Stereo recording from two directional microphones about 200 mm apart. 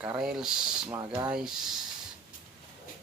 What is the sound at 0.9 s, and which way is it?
Speech, 15° right (ahead or behind).